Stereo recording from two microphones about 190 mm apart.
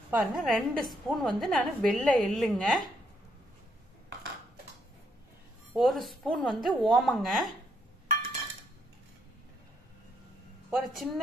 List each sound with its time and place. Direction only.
0.1 s a woman's voice: centre (ahead or behind)
5.7 s a woman's voice: centre (ahead or behind)
10.7 s speech: centre (ahead or behind)